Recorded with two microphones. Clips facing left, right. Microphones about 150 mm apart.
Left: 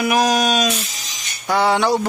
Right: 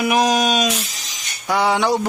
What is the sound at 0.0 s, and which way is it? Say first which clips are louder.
Speech: even; 20° right (ahead or behind).